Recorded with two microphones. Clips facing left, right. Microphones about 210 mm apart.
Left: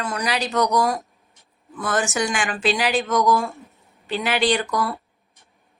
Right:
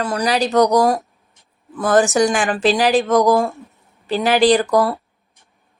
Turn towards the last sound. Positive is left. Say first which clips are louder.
# right 8 dB
turn(degrees=-35)  # may be behind; listen again after turning